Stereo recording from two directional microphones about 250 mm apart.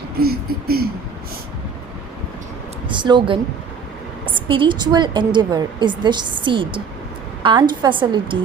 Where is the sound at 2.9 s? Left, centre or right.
Centre.